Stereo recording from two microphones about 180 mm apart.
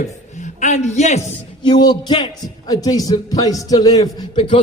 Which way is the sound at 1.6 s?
25° left (ahead or behind).